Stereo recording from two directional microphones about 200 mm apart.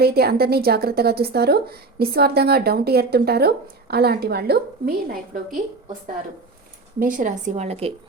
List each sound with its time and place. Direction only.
0.0 s a woman's voice: 50° right (ahead or behind)
7.0 s a woman's voice: 40° right (ahead or behind)